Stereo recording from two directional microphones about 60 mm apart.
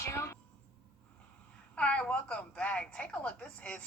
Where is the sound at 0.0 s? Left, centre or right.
Left.